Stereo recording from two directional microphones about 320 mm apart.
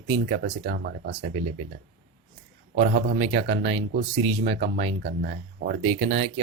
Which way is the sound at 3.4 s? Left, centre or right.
Right.